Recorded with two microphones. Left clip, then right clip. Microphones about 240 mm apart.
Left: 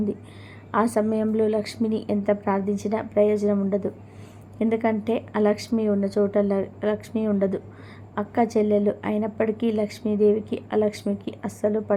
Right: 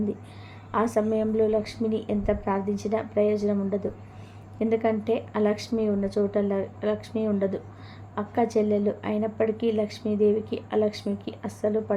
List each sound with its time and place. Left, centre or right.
0.9 s a woman's voice: centre